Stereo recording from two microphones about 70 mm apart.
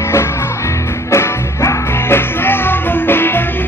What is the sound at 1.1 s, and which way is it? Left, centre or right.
Music, left.